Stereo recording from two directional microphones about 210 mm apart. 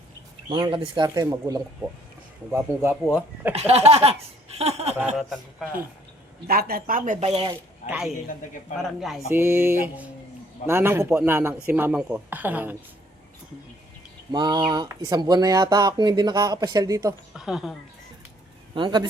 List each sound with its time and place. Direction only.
0.5 s a man's voice: 20° right (ahead or behind)
3.5 s speech: 30° right (ahead or behind)
4.9 s speech: 5° right (ahead or behind)
6.5 s speech: 45° right (ahead or behind)
7.9 s a man's voice: 5° right (ahead or behind)
14.3 s speech: 20° right (ahead or behind)
17.3 s speech: centre (ahead or behind)
18.7 s speech: 20° right (ahead or behind)